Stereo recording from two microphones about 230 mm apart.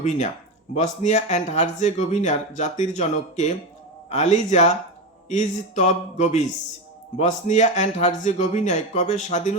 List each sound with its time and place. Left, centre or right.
0.0 s speech: left